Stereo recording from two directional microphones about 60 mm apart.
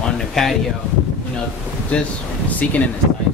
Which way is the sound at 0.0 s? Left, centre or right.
Centre.